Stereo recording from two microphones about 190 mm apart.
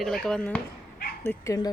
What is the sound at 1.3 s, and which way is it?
Speech, 15° left (ahead or behind).